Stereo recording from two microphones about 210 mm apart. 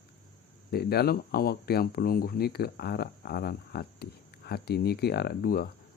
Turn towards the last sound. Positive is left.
turn(degrees=45)  # may be behind; listen again after turning